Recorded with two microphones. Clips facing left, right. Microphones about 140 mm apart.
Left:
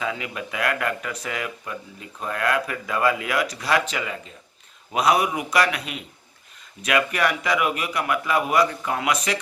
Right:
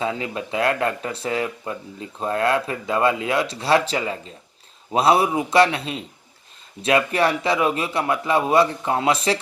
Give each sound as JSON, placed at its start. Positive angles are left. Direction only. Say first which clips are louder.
{"t": 0.0, "sound": "speech", "louder": "right 4 dB", "side_deg": -30}